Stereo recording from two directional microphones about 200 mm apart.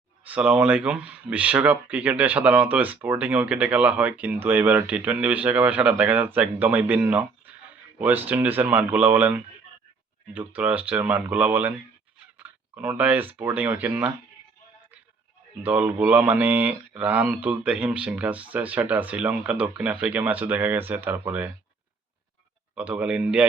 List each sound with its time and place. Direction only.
0.3 s speech: 5° right (ahead or behind)
15.6 s speech: 10° right (ahead or behind)
22.7 s speech: 5° right (ahead or behind)